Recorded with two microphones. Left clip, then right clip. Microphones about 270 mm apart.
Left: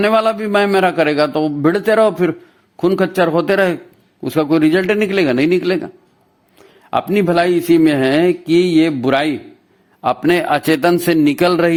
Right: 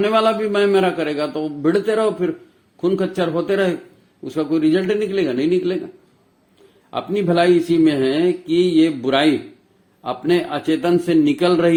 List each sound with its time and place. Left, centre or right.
0.0 s speech: left
6.9 s speech: left